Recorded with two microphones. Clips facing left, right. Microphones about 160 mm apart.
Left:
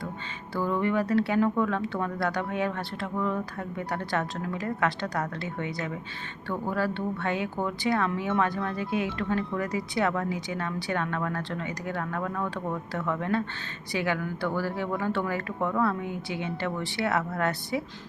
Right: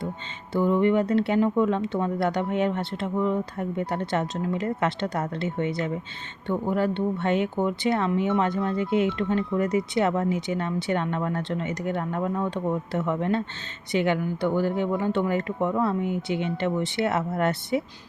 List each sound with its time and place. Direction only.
0.5 s speech: 20° right (ahead or behind)